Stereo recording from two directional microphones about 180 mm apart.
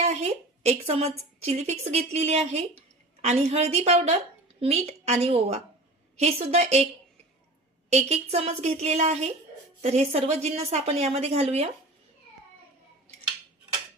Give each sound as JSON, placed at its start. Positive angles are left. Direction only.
{"t": 0.0, "sound": "a woman's voice", "side_deg": -35}
{"t": 7.9, "sound": "a woman's voice", "side_deg": -35}